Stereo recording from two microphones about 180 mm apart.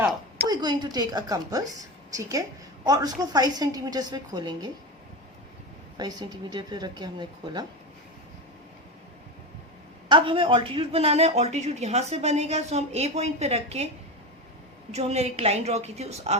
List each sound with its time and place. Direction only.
0.0 s a woman's voice: 20° right (ahead or behind)
2.8 s a woman's voice: 20° right (ahead or behind)
6.0 s a woman's voice: 20° right (ahead or behind)
10.1 s speech: 30° right (ahead or behind)
14.9 s speech: 35° right (ahead or behind)